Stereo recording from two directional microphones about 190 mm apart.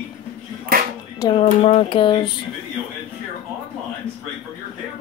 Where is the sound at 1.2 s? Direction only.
30° left (ahead or behind).